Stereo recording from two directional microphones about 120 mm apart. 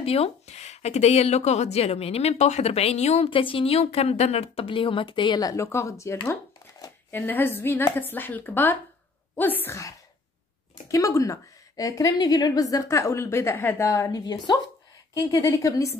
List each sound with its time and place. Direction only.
0.0 s speech: 55° left (ahead or behind)
3.3 s a woman's voice: 45° left (ahead or behind); by 16.0 s 25° left (ahead or behind)